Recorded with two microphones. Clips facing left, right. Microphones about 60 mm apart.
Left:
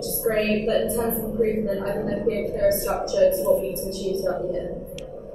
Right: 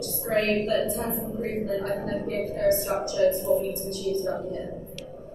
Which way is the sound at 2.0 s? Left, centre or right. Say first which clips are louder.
Left 4 dB; left.